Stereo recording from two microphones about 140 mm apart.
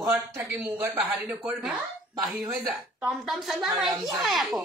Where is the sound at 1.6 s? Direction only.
Centre (ahead or behind).